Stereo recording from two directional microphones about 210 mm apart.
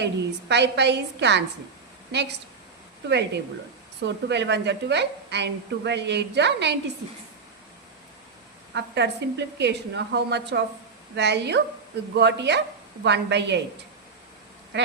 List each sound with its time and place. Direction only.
0.0 s a woman's voice: 55° right (ahead or behind)
8.7 s a woman's voice: 55° right (ahead or behind)